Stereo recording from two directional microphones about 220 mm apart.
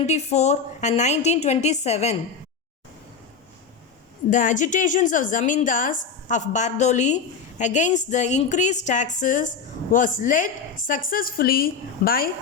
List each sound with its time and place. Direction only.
0.0 s a woman's voice: 30° left (ahead or behind)
4.3 s a woman's voice: 35° left (ahead or behind)